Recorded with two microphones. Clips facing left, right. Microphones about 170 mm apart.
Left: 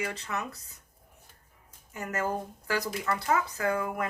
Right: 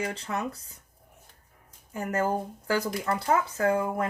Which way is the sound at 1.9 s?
30° right (ahead or behind).